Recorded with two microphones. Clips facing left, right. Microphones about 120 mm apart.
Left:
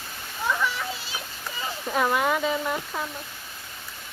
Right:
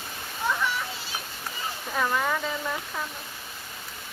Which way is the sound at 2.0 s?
20° left (ahead or behind).